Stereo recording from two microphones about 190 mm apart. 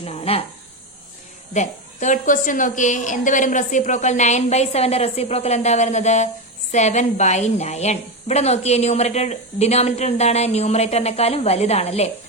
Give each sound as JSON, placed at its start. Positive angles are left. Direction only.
{"t": 0.0, "sound": "a woman's voice", "side_deg": 30}
{"t": 1.5, "sound": "a woman's voice", "side_deg": 40}